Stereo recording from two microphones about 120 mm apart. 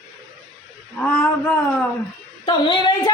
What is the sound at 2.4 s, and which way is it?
Speech, 35° left (ahead or behind).